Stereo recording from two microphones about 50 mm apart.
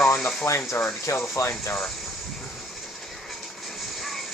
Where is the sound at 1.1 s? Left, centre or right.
Left.